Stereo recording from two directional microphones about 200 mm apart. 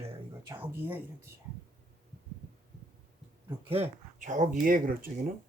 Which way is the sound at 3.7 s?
35° right (ahead or behind).